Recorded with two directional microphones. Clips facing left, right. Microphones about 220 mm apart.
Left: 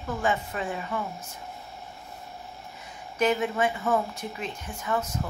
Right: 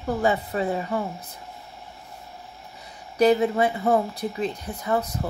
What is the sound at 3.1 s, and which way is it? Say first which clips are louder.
Speech: right 6 dB; 35° right (ahead or behind).